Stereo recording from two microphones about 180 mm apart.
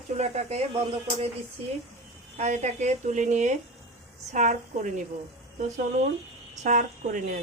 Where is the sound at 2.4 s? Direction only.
40° right (ahead or behind).